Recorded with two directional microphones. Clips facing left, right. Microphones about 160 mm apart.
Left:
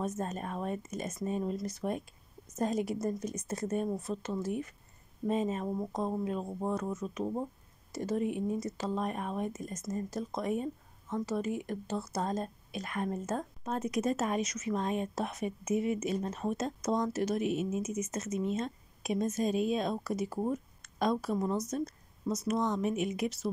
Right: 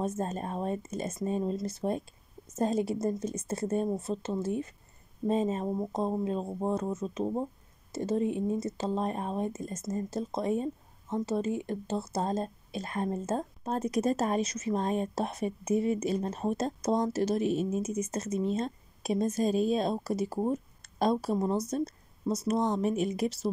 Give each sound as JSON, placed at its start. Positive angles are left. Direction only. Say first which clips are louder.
{"t": 0.0, "sound": "speech", "louder": "right 3 dB", "side_deg": -30}